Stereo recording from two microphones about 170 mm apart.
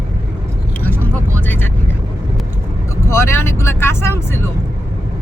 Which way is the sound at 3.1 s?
15° left (ahead or behind).